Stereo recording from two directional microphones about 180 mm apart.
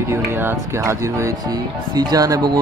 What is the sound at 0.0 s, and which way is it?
Speech, 15° right (ahead or behind).